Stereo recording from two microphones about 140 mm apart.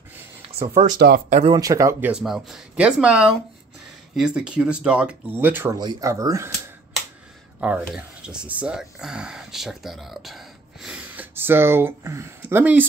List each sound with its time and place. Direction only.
0.7 s speech: 90° right
1.6 s speech: 25° right (ahead or behind)
2.0 s speech: 5° right (ahead or behind)
5.8 s speech: 30° right (ahead or behind)
7.6 s speech: 10° right (ahead or behind)